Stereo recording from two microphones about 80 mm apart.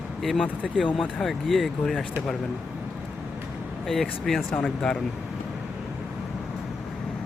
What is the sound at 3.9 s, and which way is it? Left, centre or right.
Speech, centre.